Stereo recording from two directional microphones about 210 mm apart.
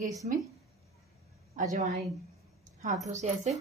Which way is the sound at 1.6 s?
35° right (ahead or behind).